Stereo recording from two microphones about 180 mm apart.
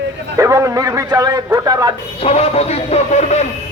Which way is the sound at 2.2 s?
35° left (ahead or behind).